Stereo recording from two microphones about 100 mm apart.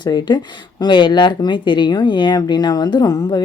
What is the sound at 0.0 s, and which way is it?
A woman's voice, 45° left (ahead or behind).